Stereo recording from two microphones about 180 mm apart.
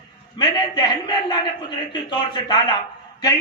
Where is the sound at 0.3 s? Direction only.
25° left (ahead or behind).